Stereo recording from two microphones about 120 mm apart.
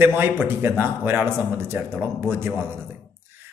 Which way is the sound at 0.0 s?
20° right (ahead or behind).